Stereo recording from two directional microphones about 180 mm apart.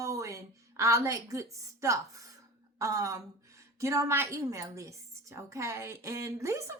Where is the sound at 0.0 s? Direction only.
15° right (ahead or behind).